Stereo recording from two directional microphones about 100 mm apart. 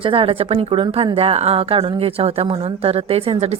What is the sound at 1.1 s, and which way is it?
Speech, 85° right.